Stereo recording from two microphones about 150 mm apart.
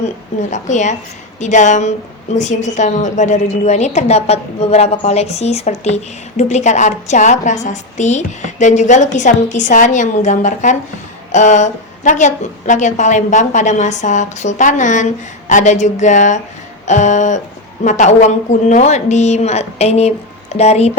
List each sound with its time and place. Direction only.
0.5 s a woman's voice: 55° left (ahead or behind)